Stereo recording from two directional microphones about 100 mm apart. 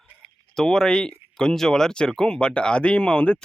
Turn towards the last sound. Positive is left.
turn(degrees=10)  # may be behind; listen again after turning